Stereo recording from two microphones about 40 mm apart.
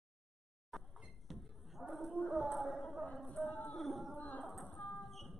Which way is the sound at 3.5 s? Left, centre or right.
Left.